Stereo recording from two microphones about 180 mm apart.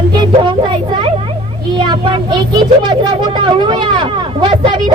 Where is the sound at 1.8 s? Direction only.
25° right (ahead or behind).